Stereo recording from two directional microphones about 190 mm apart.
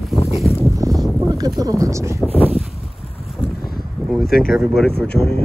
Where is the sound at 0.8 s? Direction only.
20° right (ahead or behind).